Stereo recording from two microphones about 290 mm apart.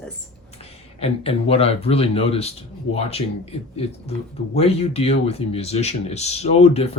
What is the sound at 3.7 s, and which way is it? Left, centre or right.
Speech, left.